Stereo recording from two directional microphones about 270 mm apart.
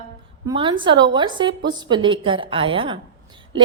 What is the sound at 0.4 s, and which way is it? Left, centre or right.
A woman's voice, centre.